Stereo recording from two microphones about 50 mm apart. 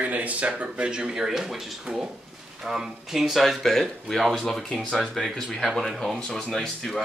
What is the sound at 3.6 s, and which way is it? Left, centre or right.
Speech, centre.